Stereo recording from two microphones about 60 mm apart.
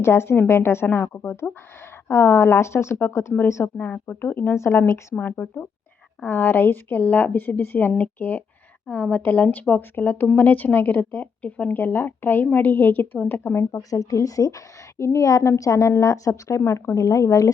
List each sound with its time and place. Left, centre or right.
0.0 s speech: left
0.9 s a woman's voice: left
1.1 s speech: left
3.8 s speech: left
5.1 s a woman's voice: left
11.7 s speech: left
13.9 s a woman's voice: left